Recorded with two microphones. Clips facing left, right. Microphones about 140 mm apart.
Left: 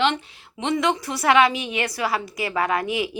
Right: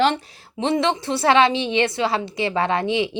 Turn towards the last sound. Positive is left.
turn(degrees=-25)  # may be behind; listen again after turning